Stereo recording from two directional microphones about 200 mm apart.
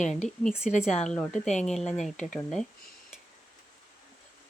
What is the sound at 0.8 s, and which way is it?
A woman's voice, 5° left (ahead or behind).